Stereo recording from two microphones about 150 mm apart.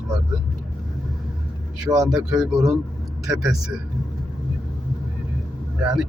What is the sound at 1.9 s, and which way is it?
Speech, 25° right (ahead or behind).